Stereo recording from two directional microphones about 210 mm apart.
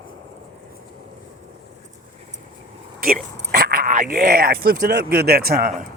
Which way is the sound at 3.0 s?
45° right (ahead or behind).